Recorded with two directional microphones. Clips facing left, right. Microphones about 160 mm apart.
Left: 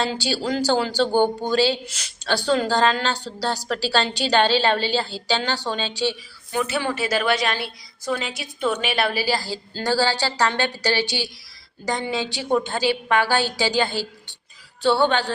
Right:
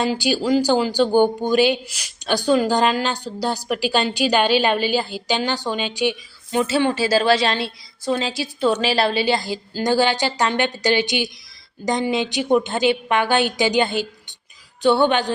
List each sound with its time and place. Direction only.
0.0 s a woman's voice: 15° right (ahead or behind)